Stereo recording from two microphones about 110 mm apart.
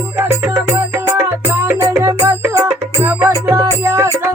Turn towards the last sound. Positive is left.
turn(degrees=-25)  # may be behind; listen again after turning